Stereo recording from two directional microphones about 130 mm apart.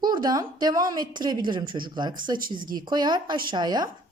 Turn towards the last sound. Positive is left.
turn(degrees=-35)  # may be behind; listen again after turning